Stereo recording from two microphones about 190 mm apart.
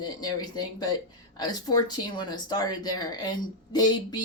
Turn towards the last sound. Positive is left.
turn(degrees=20)  # may be behind; listen again after turning